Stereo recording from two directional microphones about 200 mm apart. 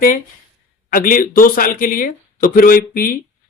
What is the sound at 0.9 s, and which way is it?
Speech, 45° left (ahead or behind).